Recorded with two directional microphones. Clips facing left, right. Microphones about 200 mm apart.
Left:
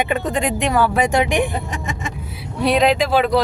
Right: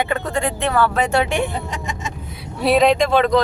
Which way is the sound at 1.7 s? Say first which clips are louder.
Left 1 dB; 50° left (ahead or behind).